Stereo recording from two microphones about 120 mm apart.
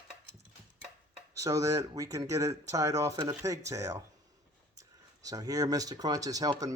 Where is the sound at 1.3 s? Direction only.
25° right (ahead or behind).